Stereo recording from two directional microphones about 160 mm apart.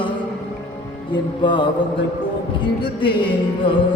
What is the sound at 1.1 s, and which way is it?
Mantra, 30° left (ahead or behind).